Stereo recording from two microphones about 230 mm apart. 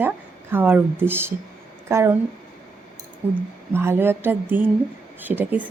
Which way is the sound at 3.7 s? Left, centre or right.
Centre.